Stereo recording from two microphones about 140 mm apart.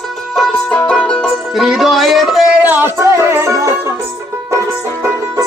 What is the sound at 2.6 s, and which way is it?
Music, 15° right (ahead or behind).